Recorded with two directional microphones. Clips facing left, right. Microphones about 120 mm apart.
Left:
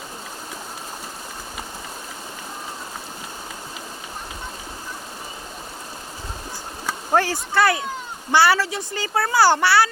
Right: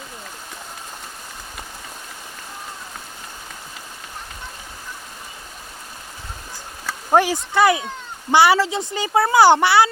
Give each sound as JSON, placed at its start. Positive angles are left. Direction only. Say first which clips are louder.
{"t": 7.1, "sound": "speech", "louder": "right 4 dB", "side_deg": -20}